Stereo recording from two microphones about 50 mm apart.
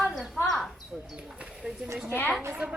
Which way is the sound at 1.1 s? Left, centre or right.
Centre.